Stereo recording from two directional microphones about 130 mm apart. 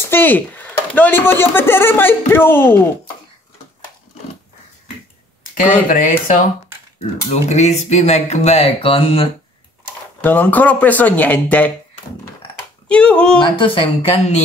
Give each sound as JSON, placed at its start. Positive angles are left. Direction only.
{"t": 0.1, "sound": "speech", "side_deg": 15}
{"t": 5.5, "sound": "speech", "side_deg": 90}
{"t": 7.2, "sound": "speech", "side_deg": 60}
{"t": 10.2, "sound": "speech", "side_deg": 15}
{"t": 12.8, "sound": "speech", "side_deg": 10}
{"t": 13.4, "sound": "a woman's voice", "side_deg": 40}